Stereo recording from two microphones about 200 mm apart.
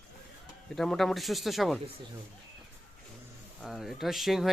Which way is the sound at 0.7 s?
Centre (ahead or behind).